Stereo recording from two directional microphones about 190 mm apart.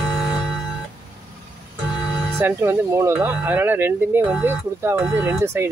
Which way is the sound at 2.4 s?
10° right (ahead or behind).